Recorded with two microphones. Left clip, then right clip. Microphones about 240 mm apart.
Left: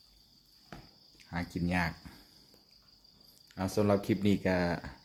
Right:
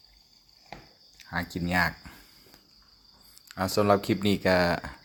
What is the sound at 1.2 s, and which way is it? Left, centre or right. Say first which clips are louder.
Speech: right 6 dB; centre.